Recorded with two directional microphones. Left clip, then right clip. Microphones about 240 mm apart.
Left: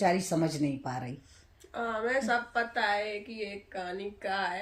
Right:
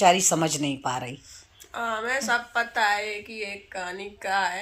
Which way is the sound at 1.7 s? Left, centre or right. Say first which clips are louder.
Right 3 dB; centre.